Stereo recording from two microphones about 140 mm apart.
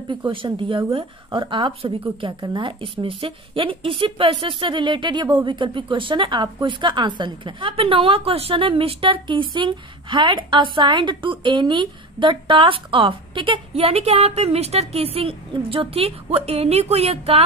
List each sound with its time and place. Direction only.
0.3 s speech: 35° right (ahead or behind)